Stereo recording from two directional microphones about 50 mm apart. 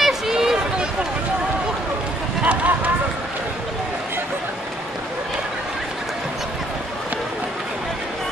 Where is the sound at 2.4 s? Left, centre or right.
Right.